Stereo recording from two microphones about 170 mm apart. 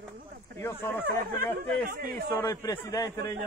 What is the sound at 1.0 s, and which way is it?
Speech, 60° right (ahead or behind).